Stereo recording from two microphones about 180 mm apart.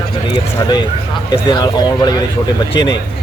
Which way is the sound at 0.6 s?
25° left (ahead or behind).